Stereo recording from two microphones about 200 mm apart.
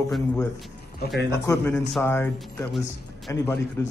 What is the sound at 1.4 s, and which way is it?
A man's voice, 10° left (ahead or behind).